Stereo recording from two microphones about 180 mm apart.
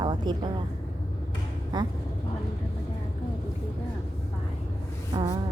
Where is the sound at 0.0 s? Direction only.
25° right (ahead or behind).